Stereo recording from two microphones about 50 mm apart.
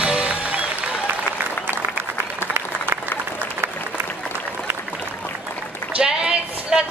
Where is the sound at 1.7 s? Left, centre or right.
Right.